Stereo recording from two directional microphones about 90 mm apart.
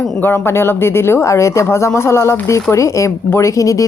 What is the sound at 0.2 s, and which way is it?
Speech, 25° left (ahead or behind).